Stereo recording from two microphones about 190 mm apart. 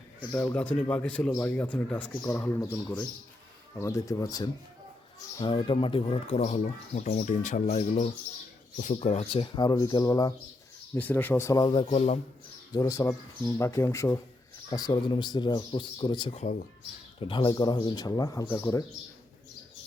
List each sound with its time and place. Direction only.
0.3 s speech: 10° left (ahead or behind)
3.8 s speech: 15° left (ahead or behind)
10.9 s speech: 10° left (ahead or behind)
11.9 s speech: 35° left (ahead or behind)
12.7 s speech: 15° left (ahead or behind); by 16.6 s 40° left (ahead or behind)
17.2 s speech: 25° left (ahead or behind)